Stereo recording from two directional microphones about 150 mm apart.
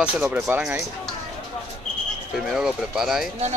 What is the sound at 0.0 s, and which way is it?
Speech, 15° right (ahead or behind).